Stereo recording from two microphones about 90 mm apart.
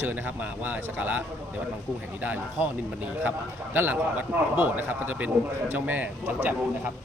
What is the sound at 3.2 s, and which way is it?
A man's voice, 20° right (ahead or behind).